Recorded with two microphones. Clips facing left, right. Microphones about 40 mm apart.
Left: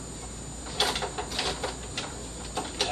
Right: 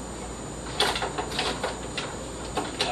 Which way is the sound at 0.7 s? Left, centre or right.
Centre.